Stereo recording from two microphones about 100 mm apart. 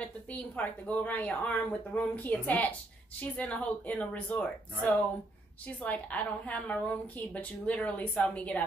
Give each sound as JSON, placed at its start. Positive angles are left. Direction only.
{"t": 0.0, "sound": "a woman's voice", "side_deg": 15}
{"t": 5.8, "sound": "a woman's voice", "side_deg": 15}